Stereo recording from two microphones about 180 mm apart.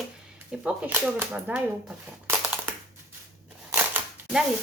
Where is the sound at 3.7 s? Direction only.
10° right (ahead or behind).